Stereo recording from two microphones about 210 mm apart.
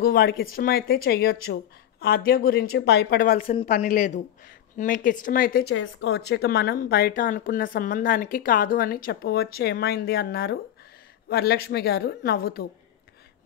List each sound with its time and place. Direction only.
0.0 s speech: 45° left (ahead or behind)